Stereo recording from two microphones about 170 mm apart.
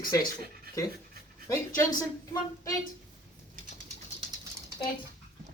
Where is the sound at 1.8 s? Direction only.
20° left (ahead or behind).